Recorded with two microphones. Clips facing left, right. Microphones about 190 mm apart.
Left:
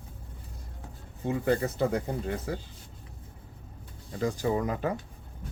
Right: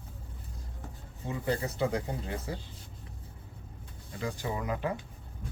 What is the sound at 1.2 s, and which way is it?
Speech, 55° left (ahead or behind).